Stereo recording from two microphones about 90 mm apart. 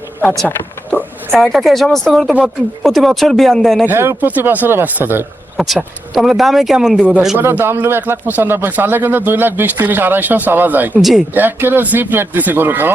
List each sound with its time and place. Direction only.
0.4 s a sound: 20° left (ahead or behind)
1.4 s speech: 5° left (ahead or behind)
3.8 s speech: 25° right (ahead or behind)
5.5 s speech: centre (ahead or behind)
7.3 s speech: 25° right (ahead or behind)